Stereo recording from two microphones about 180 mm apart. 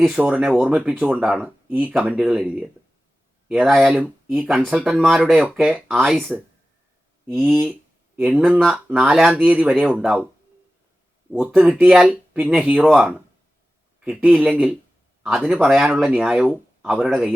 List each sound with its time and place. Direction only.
0.2 s speech: 5° right (ahead or behind)
7.4 s speech: 10° right (ahead or behind)
11.3 s speech: 5° right (ahead or behind)